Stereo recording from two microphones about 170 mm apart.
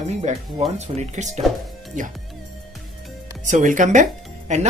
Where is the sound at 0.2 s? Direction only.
40° right (ahead or behind).